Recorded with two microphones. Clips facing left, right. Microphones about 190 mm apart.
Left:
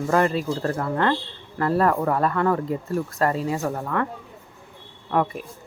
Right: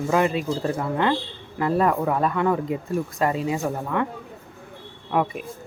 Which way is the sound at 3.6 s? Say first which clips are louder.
Even; 5° right (ahead or behind).